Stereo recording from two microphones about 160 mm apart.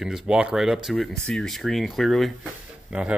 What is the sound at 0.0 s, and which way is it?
Speech, 5° right (ahead or behind).